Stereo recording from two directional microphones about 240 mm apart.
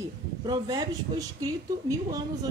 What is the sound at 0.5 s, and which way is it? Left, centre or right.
Speech, centre.